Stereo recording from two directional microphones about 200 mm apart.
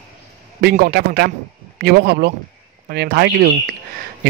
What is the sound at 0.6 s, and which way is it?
A man's voice, 50° right (ahead or behind).